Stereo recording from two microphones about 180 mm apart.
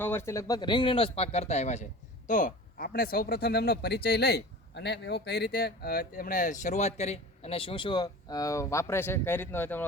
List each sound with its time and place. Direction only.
0.0 s speech: 15° left (ahead or behind)